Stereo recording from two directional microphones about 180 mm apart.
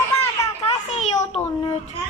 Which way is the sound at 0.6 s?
35° left (ahead or behind).